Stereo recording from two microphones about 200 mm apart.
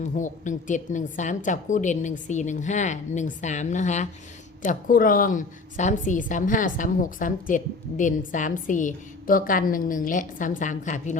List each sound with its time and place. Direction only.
0.0 s a woman's voice: 40° left (ahead or behind)